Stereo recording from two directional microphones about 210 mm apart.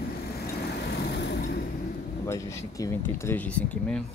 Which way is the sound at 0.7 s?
55° left (ahead or behind).